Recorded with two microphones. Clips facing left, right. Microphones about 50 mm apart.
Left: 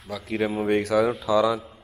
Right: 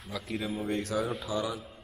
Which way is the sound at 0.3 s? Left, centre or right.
Left.